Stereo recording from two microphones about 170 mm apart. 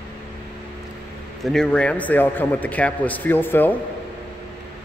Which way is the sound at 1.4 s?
5° left (ahead or behind).